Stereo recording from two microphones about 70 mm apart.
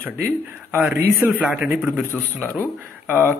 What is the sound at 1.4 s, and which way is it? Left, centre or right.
A man's voice, centre.